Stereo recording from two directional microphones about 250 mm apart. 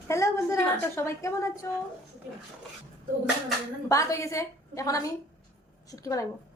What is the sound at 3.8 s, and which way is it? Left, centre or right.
A woman's voice, centre.